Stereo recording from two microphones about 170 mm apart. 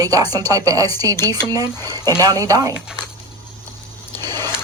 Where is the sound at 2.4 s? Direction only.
20° right (ahead or behind).